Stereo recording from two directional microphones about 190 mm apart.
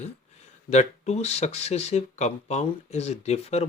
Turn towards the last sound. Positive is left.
turn(degrees=35)  # may be behind; listen again after turning